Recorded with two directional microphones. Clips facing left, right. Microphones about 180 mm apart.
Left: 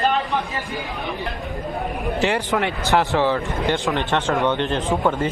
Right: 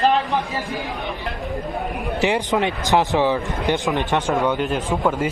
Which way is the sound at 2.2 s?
15° right (ahead or behind).